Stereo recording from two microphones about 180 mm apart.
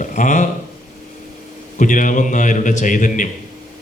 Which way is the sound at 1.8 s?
45° left (ahead or behind).